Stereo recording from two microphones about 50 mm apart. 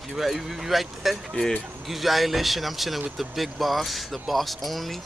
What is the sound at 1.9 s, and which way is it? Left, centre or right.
A man's voice, centre.